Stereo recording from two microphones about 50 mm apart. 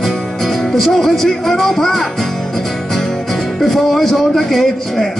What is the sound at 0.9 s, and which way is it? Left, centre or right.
Speech, centre.